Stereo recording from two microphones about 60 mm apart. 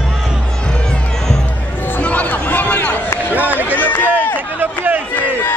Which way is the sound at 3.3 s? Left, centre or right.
Right.